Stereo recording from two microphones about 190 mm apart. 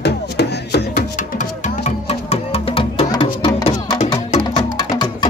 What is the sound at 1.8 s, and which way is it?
Music, 35° left (ahead or behind).